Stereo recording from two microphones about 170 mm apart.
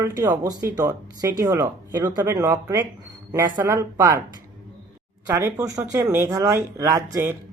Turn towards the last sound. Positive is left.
turn(degrees=-15)  # may be behind; listen again after turning